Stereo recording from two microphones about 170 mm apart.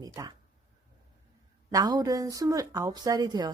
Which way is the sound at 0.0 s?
20° right (ahead or behind).